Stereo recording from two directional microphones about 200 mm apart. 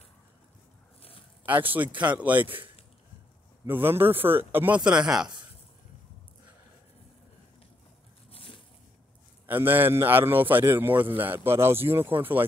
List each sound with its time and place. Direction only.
1.4 s a man's voice: 10° right (ahead or behind)
3.6 s a man's voice: 10° right (ahead or behind)
8.3 s a sound: 25° left (ahead or behind)
9.5 s a man's voice: 10° right (ahead or behind)